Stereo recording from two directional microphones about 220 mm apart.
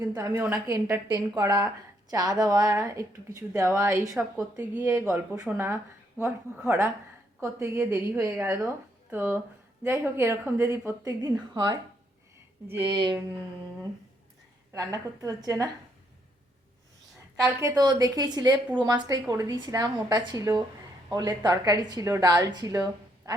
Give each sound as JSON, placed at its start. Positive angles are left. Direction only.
{"t": 0.0, "sound": "speech", "side_deg": -15}
{"t": 12.9, "sound": "a sound", "side_deg": -20}
{"t": 14.7, "sound": "speech", "side_deg": -15}
{"t": 17.6, "sound": "a woman's voice", "side_deg": -15}